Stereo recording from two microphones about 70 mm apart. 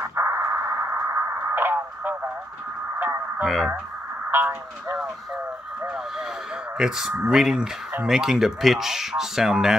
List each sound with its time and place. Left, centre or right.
0.0 s radio: right
3.4 s speech: centre
4.3 s speech: right
6.8 s speech: centre